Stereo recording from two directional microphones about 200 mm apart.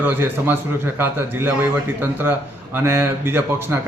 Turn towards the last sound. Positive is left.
turn(degrees=-10)  # may be behind; listen again after turning